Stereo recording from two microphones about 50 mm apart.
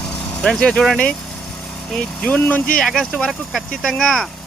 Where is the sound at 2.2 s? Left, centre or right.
Left.